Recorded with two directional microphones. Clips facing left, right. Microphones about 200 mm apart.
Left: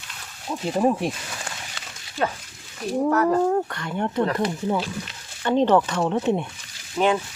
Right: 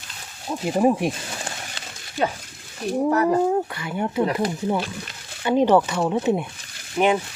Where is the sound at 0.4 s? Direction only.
15° right (ahead or behind).